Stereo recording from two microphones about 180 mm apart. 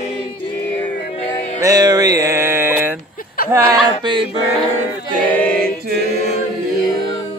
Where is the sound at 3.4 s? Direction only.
55° left (ahead or behind).